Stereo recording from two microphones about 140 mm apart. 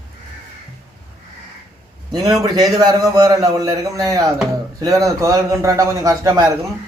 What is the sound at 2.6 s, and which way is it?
A man's voice, 25° right (ahead or behind).